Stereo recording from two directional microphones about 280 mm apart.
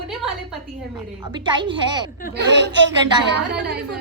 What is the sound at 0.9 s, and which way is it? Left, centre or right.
A woman's voice, centre.